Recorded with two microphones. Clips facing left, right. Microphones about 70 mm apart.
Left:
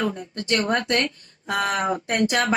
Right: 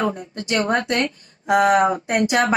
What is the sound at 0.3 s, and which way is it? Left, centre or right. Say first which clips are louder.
Speech: right 2 dB; centre.